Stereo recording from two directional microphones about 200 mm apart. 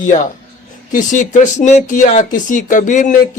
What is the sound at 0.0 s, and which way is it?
Speech, 40° left (ahead or behind).